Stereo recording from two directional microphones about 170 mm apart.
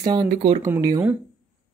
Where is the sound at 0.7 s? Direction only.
20° right (ahead or behind).